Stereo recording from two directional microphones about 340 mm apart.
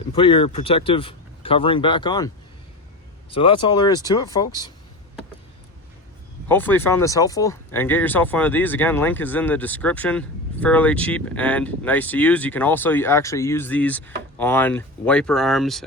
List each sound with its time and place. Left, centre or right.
0.1 s speech: centre
6.5 s speech: centre